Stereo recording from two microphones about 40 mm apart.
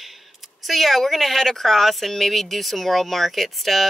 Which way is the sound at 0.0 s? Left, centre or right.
Centre.